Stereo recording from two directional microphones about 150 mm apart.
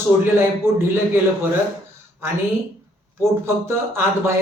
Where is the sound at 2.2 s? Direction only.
15° right (ahead or behind).